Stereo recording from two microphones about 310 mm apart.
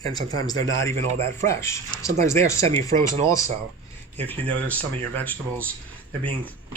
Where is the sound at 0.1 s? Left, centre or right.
Centre.